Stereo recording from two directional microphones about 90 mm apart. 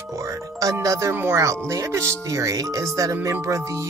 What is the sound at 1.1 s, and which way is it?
Speech, 25° right (ahead or behind).